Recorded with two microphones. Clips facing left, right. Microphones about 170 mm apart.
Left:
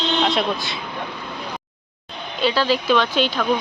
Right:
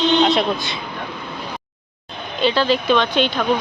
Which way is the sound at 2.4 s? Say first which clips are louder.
Right 2 dB; 5° left (ahead or behind).